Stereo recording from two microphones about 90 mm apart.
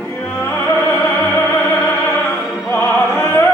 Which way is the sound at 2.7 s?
25° left (ahead or behind).